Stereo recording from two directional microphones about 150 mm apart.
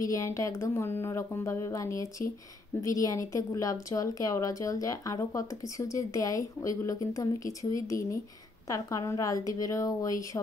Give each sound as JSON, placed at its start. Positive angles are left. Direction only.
{"t": 0.0, "sound": "speech", "side_deg": 20}